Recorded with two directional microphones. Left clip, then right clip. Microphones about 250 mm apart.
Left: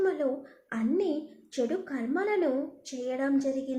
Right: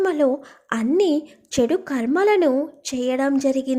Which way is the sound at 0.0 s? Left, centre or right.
Right.